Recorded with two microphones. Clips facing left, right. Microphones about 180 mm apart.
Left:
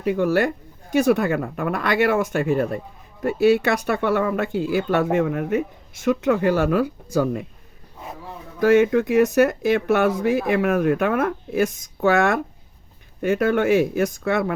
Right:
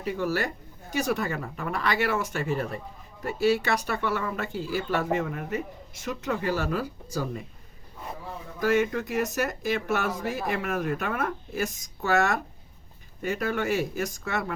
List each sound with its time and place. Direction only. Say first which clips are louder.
0.0 s speech: left 8 dB; 55° left (ahead or behind)
8.6 s speech: left 9 dB; 60° left (ahead or behind)